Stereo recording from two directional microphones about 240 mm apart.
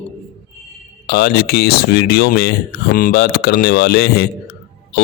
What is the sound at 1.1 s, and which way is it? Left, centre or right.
Speech, left.